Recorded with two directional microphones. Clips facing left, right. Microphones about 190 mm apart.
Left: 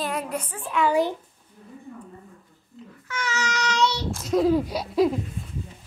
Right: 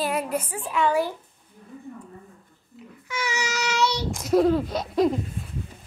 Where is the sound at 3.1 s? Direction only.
10° right (ahead or behind).